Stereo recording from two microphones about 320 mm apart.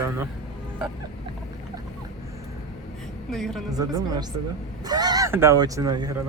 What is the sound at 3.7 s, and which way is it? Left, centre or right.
Speech, centre.